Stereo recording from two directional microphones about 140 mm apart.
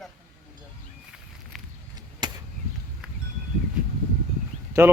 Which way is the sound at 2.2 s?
30° right (ahead or behind).